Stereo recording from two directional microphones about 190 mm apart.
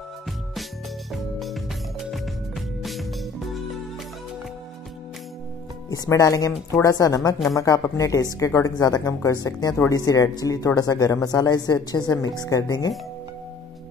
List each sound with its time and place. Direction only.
1.1 s music: centre (ahead or behind)
5.9 s speech: 15° left (ahead or behind)